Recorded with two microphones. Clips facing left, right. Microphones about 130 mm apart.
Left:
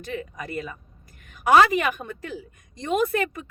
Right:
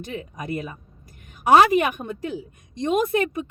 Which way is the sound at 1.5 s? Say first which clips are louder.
Right 2 dB; 30° right (ahead or behind).